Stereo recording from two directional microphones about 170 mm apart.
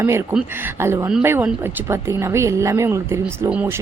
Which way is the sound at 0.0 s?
15° right (ahead or behind).